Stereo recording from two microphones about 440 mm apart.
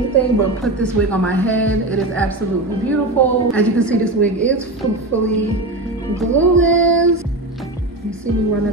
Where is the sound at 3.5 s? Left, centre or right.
Centre.